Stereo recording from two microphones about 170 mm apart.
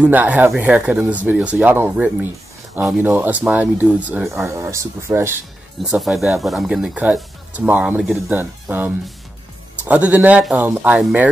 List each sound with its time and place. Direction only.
0.0 s speech: 10° right (ahead or behind)
5.8 s speech: centre (ahead or behind)